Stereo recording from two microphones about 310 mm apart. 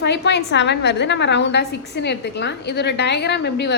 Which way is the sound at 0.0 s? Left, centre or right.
Left.